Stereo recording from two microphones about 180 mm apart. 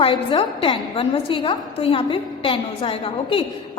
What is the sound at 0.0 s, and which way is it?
A woman's voice, 30° left (ahead or behind).